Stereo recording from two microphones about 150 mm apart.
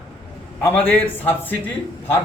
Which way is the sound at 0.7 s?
10° left (ahead or behind).